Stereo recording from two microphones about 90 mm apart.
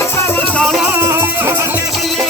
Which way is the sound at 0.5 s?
5° left (ahead or behind).